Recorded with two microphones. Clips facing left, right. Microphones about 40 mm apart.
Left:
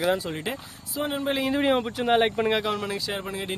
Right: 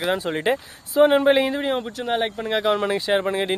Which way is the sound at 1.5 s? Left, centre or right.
Centre.